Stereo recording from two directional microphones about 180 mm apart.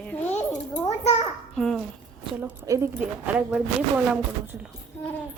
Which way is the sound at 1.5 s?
Centre (ahead or behind).